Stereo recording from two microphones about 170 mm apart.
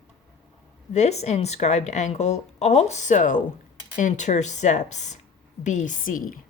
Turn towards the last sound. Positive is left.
turn(degrees=55)  # may be behind; listen again after turning